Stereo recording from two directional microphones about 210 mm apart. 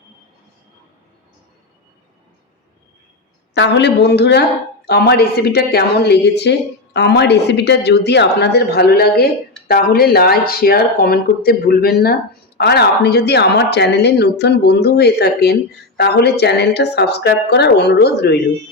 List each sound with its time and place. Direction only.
3.5 s a woman's voice: 55° left (ahead or behind)